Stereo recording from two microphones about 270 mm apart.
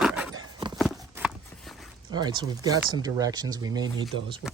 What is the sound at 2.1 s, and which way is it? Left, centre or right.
Speech, centre.